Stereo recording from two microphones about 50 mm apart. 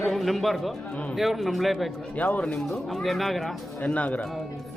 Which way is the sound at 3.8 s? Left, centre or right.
Left.